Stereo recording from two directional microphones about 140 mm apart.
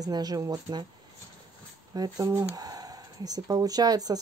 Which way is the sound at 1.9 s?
25° right (ahead or behind).